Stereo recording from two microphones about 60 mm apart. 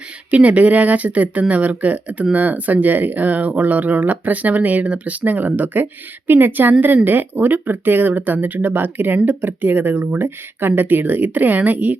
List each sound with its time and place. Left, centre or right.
0.3 s speech: right